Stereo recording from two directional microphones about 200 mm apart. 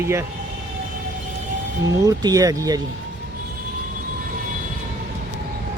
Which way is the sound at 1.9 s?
15° right (ahead or behind).